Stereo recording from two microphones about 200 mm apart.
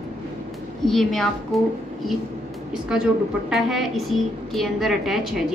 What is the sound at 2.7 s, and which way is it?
A woman's voice, 5° right (ahead or behind).